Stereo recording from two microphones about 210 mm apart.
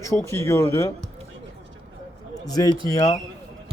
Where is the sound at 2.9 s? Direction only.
15° left (ahead or behind).